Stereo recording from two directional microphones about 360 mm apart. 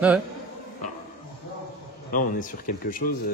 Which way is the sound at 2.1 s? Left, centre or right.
Left.